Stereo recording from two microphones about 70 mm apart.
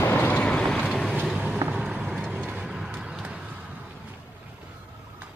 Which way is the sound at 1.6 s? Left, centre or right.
Right.